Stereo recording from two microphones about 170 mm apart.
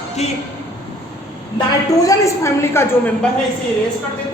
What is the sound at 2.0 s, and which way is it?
Speech, 15° left (ahead or behind).